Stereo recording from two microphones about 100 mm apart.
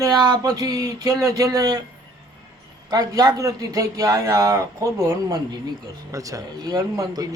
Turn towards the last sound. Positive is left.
turn(degrees=-35)  # may be behind; listen again after turning